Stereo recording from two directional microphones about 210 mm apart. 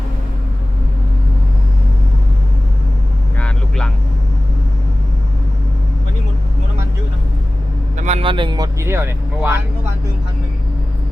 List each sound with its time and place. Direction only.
3.3 s vehicle: 5° left (ahead or behind)
7.9 s speech: 30° right (ahead or behind); by 9.6 s 10° right (ahead or behind)